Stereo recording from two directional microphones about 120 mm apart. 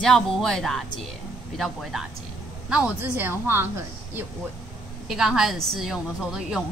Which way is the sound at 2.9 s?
20° right (ahead or behind).